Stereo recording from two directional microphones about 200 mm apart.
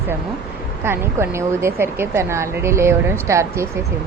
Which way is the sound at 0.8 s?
10° right (ahead or behind).